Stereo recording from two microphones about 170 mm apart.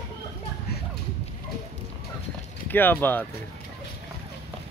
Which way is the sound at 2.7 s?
10° left (ahead or behind).